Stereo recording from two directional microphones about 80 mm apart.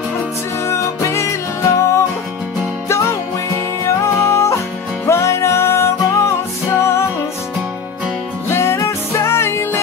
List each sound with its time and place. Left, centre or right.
0.7 s music: left
4.0 s music: left
8.5 s music: left